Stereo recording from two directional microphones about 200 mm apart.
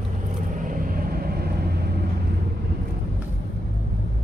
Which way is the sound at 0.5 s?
40° right (ahead or behind).